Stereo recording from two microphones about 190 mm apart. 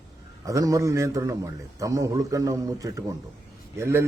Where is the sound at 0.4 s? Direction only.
15° right (ahead or behind).